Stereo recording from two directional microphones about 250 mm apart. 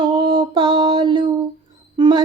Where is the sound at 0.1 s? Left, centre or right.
Centre.